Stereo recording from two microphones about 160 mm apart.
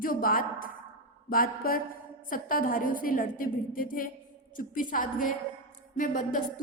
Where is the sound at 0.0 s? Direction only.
65° left (ahead or behind).